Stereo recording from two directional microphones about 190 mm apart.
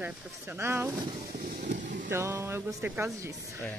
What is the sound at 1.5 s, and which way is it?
Vehicle, 40° right (ahead or behind).